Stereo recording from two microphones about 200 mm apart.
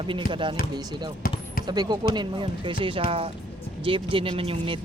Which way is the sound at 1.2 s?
45° left (ahead or behind).